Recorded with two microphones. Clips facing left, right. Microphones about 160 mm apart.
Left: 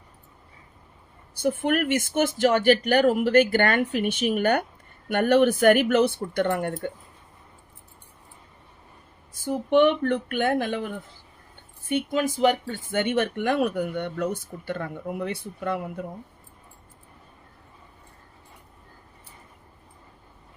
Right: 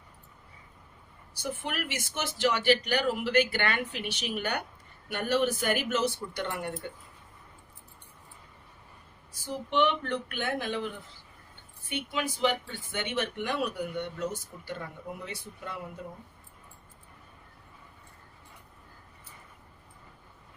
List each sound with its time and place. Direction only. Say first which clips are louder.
1.4 s speech: left 11 dB; 55° left (ahead or behind)
9.3 s speech: left 9 dB; 50° left (ahead or behind)